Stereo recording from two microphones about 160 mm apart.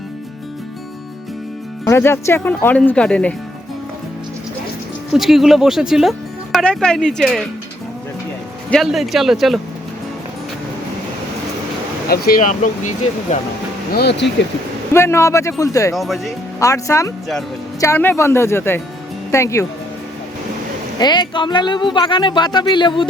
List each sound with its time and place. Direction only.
1.8 s speech: 15° left (ahead or behind)
5.1 s speech: centre (ahead or behind)
8.7 s speech: centre (ahead or behind)
12.0 s speech: 75° left (ahead or behind); by 12.9 s 50° left (ahead or behind)
13.9 s speech: 90° left
14.9 s speech: 15° left (ahead or behind)
16.0 s speech: centre (ahead or behind)
16.6 s speech: 20° left (ahead or behind)
21.0 s speech: 30° left (ahead or behind)